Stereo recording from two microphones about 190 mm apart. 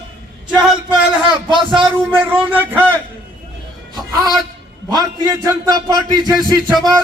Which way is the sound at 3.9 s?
20° right (ahead or behind).